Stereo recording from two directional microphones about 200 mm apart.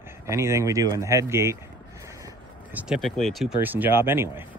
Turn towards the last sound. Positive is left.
turn(degrees=-10)  # may be behind; listen again after turning